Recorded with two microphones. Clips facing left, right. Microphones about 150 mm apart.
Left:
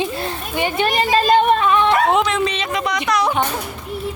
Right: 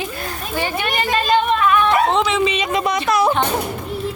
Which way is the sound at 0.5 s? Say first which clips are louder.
Left 2 dB; 20° left (ahead or behind).